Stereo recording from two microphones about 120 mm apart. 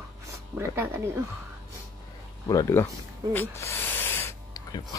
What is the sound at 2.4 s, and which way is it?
Speech, 25° left (ahead or behind).